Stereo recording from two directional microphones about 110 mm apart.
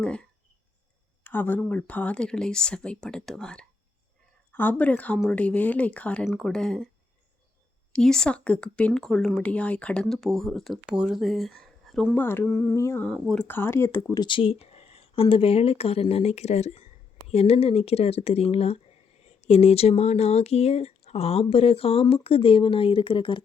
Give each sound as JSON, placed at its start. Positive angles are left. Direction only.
{"t": 0.0, "sound": "speech", "side_deg": 10}
{"t": 4.8, "sound": "speech", "side_deg": 15}
{"t": 7.9, "sound": "speech", "side_deg": 5}
{"t": 12.1, "sound": "speech", "side_deg": 20}
{"t": 12.5, "sound": "speech", "side_deg": 5}
{"t": 12.7, "sound": "speech", "side_deg": 25}
{"t": 13.2, "sound": "speech", "side_deg": 5}
{"t": 13.5, "sound": "speech", "side_deg": 20}
{"t": 14.1, "sound": "speech", "side_deg": 45}
{"t": 19.2, "sound": "speech", "side_deg": 75}